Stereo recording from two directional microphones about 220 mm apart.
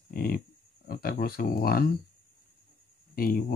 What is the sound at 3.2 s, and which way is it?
Speech, 40° left (ahead or behind).